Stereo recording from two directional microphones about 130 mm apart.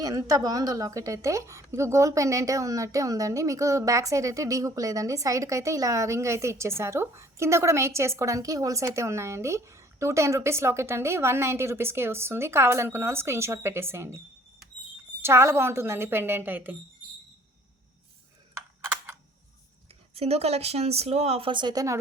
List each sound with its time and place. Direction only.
0.0 s a woman's voice: 25° right (ahead or behind)
15.2 s a woman's voice: 20° right (ahead or behind)
18.5 s computer keyboard: 20° right (ahead or behind)
20.1 s speech: 55° right (ahead or behind); by 21.9 s 30° right (ahead or behind)